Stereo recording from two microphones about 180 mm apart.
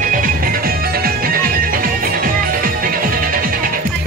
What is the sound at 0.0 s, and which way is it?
Music, 50° right (ahead or behind).